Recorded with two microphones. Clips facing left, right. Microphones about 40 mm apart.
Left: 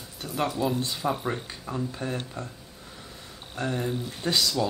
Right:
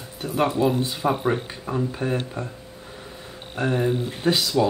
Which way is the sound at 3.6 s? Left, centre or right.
Right.